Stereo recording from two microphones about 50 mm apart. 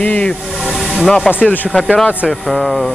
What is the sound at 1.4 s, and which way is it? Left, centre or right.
Speech, left.